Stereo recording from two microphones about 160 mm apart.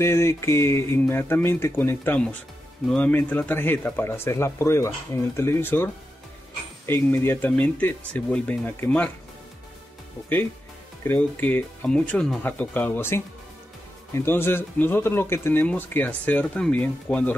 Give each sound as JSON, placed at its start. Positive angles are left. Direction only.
{"t": 0.0, "sound": "speech", "side_deg": 15}
{"t": 6.9, "sound": "speech", "side_deg": 15}
{"t": 11.1, "sound": "speech", "side_deg": 10}